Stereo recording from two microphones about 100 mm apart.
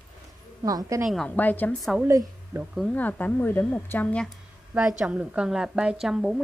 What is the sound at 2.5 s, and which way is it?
Speech, 25° right (ahead or behind).